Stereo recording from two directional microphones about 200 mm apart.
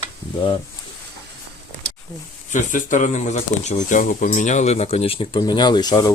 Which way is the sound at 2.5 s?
40° left (ahead or behind).